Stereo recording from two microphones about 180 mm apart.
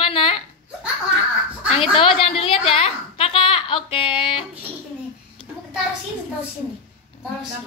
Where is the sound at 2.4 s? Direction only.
30° left (ahead or behind).